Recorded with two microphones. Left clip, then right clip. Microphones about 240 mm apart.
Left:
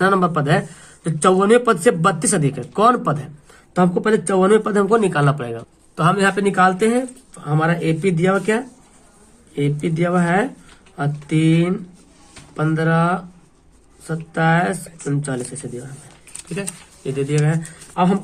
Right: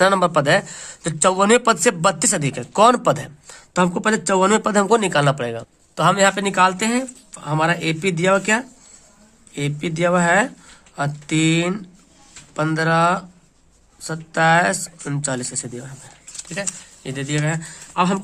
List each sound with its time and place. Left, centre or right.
0.0 s speech: right
17.2 s speech: right